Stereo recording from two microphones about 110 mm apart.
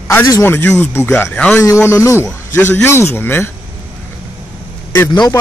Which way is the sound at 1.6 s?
25° left (ahead or behind).